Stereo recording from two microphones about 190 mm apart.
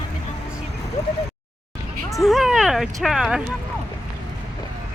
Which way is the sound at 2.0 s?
Centre (ahead or behind).